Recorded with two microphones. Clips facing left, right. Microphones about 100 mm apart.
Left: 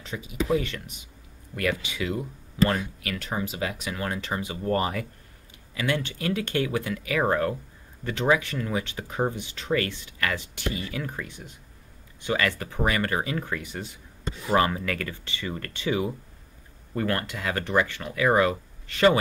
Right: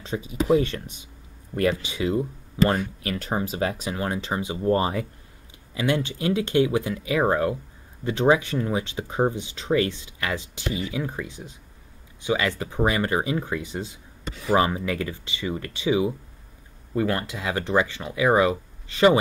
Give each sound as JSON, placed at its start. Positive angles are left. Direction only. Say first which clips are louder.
{"t": 0.0, "sound": "speech", "louder": "right 3 dB", "side_deg": -30}